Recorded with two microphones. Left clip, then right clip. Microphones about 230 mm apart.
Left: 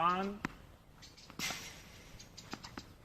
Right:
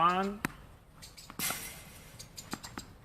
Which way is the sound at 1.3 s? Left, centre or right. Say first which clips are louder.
Right 2 dB; right.